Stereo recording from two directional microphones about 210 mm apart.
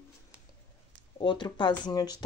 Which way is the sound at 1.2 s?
20° left (ahead or behind).